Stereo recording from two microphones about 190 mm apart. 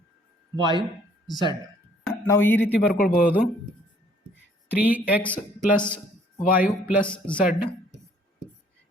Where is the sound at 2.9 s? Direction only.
50° left (ahead or behind).